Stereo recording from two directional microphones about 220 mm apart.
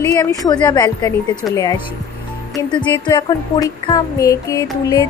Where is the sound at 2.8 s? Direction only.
20° left (ahead or behind).